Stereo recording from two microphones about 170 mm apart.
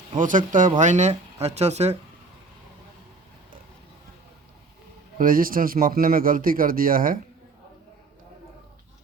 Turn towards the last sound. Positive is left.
turn(degrees=-55)  # may be behind; listen again after turning